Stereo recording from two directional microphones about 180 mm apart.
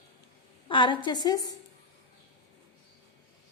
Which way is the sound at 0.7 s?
25° left (ahead or behind).